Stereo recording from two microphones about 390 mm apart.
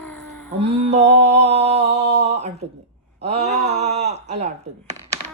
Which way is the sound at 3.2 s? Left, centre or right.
Centre.